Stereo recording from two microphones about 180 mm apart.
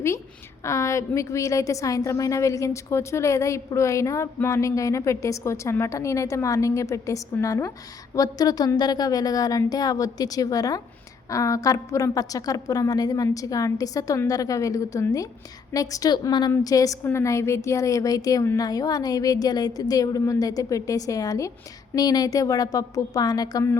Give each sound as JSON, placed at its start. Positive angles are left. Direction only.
{"t": 0.6, "sound": "a woman's voice", "side_deg": 15}